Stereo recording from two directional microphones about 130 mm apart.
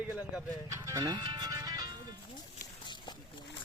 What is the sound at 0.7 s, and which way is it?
Music, 25° right (ahead or behind).